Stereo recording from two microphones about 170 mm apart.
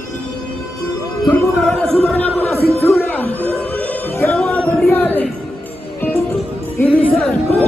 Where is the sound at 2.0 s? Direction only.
10° left (ahead or behind).